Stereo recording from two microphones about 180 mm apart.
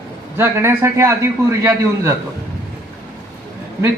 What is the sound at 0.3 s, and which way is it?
A man's voice, 15° right (ahead or behind).